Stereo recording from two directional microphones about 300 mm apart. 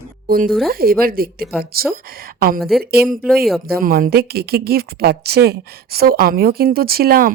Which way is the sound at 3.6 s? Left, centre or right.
Right.